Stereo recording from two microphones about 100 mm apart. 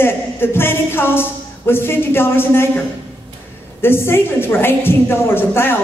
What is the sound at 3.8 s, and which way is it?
A woman's voice, 25° left (ahead or behind).